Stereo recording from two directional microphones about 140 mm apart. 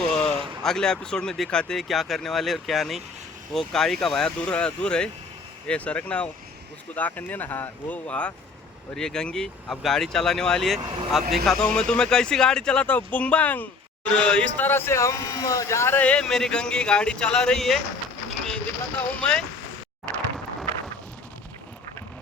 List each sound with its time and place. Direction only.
0.0 s a sound: 5° left (ahead or behind)
0.6 s speech: 5° left (ahead or behind)
10.8 s speech: 35° right (ahead or behind)
11.4 s speech: 5° left (ahead or behind)
18.4 s a sound: 5° left (ahead or behind)
20.1 s speech: 10° left (ahead or behind)